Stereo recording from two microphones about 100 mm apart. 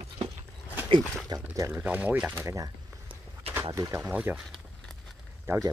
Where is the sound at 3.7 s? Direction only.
30° right (ahead or behind).